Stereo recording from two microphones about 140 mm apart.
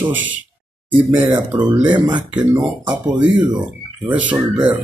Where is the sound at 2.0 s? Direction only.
35° right (ahead or behind).